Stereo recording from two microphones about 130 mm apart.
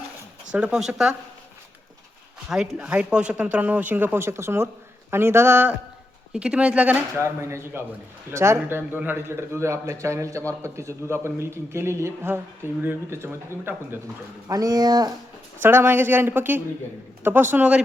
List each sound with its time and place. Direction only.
0.5 s speech: 5° right (ahead or behind)
2.5 s a man's voice: 5° right (ahead or behind)
6.3 s a man's voice: 5° right (ahead or behind); by 15.1 s 30° right (ahead or behind)
15.6 s speech: 15° right (ahead or behind)